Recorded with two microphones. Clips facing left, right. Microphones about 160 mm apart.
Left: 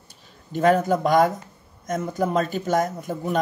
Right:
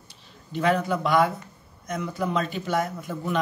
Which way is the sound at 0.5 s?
45° left (ahead or behind).